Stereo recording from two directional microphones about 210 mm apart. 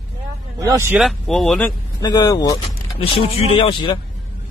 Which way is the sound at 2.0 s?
15° left (ahead or behind).